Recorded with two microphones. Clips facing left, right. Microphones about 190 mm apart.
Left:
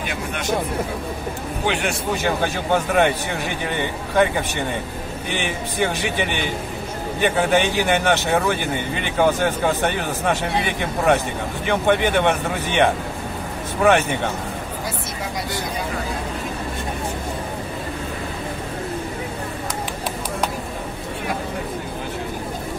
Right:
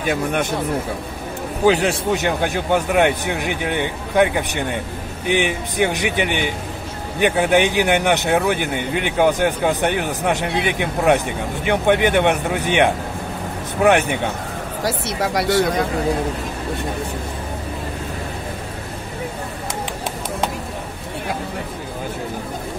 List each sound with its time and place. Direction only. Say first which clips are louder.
1.7 s a man's voice: right 7 dB; 35° right (ahead or behind)
2.2 s speech: right 1 dB; 15° right (ahead or behind)
14.8 s speech: right 6 dB; 75° right (ahead or behind)